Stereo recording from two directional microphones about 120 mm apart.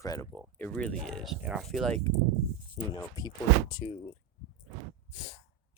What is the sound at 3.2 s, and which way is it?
Speech, 35° left (ahead or behind).